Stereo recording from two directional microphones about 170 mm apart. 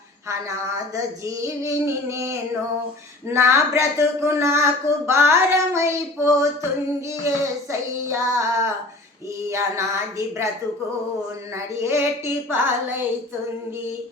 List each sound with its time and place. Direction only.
0.9 s speech: 20° right (ahead or behind)
7.7 s speech: 15° right (ahead or behind)
9.5 s speech: 15° right (ahead or behind)
11.5 s speech: 15° right (ahead or behind)